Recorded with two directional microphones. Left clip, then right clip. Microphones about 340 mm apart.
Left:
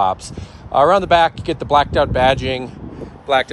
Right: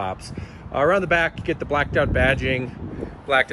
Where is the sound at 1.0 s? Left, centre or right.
Left.